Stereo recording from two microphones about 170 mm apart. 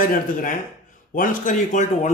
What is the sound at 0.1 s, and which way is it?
Speech, 55° left (ahead or behind).